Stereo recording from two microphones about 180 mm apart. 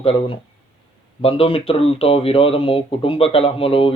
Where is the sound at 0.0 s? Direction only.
30° left (ahead or behind).